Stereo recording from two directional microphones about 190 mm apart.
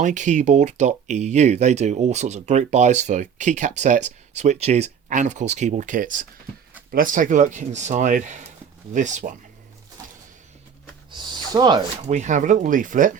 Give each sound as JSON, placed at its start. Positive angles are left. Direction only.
{"t": 0.0, "sound": "speech", "side_deg": -40}
{"t": 11.1, "sound": "speech", "side_deg": -20}
{"t": 12.0, "sound": "speech", "side_deg": -40}